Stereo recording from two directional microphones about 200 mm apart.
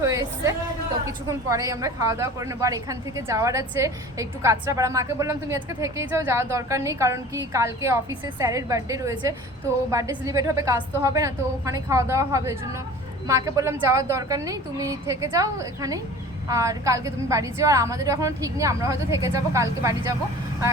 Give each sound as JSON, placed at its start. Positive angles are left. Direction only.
{"t": 0.0, "sound": "a woman's voice", "side_deg": -15}